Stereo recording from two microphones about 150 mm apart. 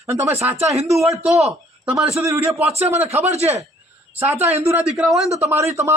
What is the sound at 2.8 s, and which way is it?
Speech, 45° right (ahead or behind).